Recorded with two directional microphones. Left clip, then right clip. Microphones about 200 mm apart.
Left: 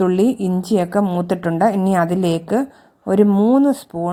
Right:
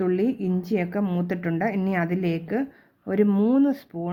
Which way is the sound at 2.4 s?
Centre (ahead or behind).